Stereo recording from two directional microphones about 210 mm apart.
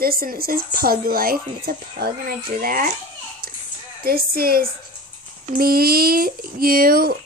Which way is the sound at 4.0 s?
45° right (ahead or behind).